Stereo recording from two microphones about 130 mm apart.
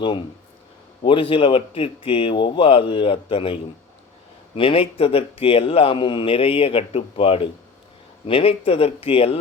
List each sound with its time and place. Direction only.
1.0 s a man's voice: 45° left (ahead or behind)